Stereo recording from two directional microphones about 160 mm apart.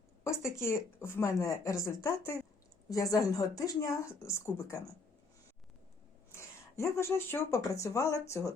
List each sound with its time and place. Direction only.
0.6 s speech: 15° left (ahead or behind)
6.3 s speech: 15° left (ahead or behind)